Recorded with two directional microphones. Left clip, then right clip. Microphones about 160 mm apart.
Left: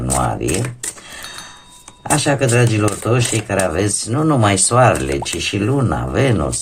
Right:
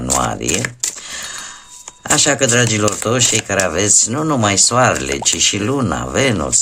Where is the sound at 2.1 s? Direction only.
35° right (ahead or behind).